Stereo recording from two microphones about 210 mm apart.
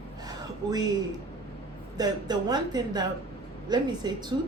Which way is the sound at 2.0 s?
20° right (ahead or behind).